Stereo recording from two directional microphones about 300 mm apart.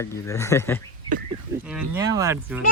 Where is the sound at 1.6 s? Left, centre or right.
Centre.